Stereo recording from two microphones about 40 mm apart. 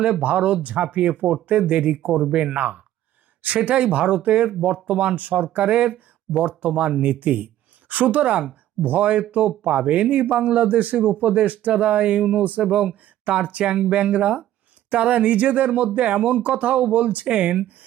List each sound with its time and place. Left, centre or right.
0.2 s speech: right
2.1 s speech: right
2.6 s speech: right
7.2 s a woman's voice: right